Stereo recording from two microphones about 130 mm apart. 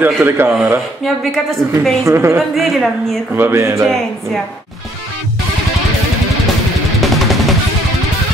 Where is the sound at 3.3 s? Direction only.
20° right (ahead or behind).